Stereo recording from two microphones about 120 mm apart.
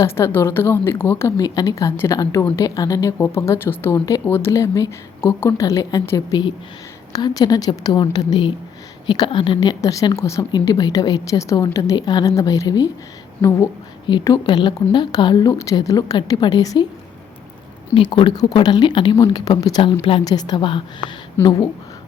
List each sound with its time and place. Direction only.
0.0 s a woman's voice: 20° left (ahead or behind)
14.1 s a woman's voice: 40° left (ahead or behind)
17.9 s a woman's voice: 45° left (ahead or behind)
20.2 s a woman's voice: 35° left (ahead or behind)
21.4 s a woman's voice: 20° left (ahead or behind)